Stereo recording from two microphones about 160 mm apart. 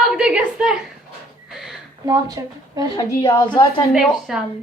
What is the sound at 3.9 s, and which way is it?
Speech, centre (ahead or behind).